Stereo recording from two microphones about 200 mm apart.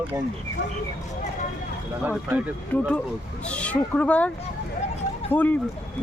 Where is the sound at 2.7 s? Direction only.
10° left (ahead or behind).